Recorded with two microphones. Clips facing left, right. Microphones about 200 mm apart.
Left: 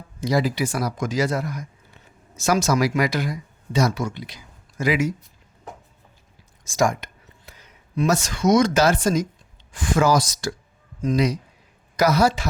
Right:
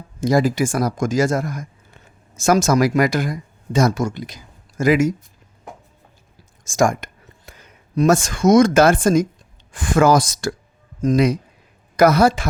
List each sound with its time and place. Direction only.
0.2 s speech: 45° right (ahead or behind)
6.7 s speech: 50° right (ahead or behind)